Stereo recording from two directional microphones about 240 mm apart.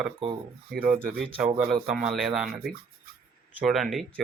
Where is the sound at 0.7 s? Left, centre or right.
Right.